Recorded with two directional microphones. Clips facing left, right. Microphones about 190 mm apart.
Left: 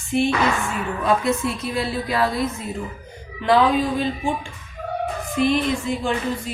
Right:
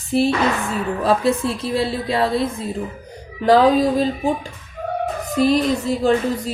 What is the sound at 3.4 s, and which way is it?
Music, 40° right (ahead or behind).